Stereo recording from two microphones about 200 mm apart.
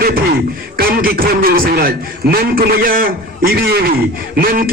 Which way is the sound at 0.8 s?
45° right (ahead or behind).